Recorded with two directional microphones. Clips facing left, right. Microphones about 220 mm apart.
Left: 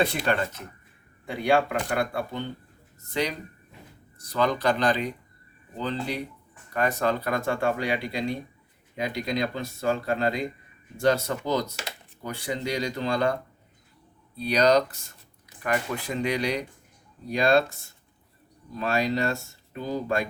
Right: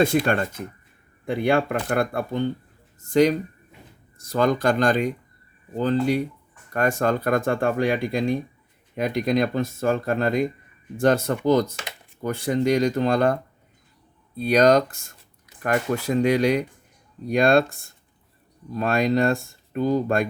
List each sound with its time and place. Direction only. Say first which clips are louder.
0.0 s speech: right 5 dB; 45° right (ahead or behind)
14.3 s speech: right 4 dB; 50° right (ahead or behind)
18.8 s speech: right 5 dB; 50° right (ahead or behind)